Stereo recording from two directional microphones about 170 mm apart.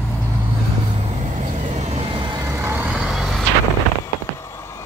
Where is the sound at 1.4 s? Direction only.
45° right (ahead or behind).